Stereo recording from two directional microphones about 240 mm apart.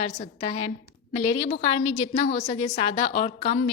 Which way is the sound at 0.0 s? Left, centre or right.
Left.